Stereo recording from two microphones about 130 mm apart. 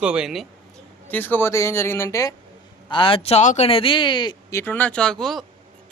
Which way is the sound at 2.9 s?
45° left (ahead or behind).